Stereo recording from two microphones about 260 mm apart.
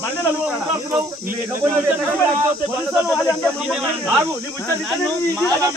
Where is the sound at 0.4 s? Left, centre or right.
Centre.